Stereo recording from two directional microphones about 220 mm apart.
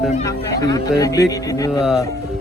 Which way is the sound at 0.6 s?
15° left (ahead or behind).